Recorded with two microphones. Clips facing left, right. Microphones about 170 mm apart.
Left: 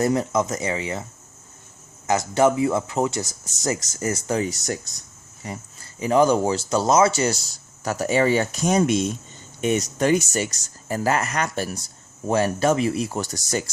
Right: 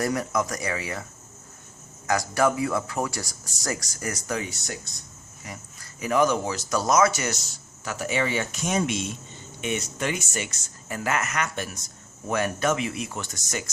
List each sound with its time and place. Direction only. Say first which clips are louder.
0.0 s speech: left 5 dB; 25° left (ahead or behind)
2.0 s speech: left 4 dB; 20° left (ahead or behind)